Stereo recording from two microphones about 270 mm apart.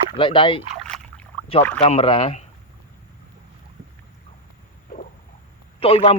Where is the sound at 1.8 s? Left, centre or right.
Left.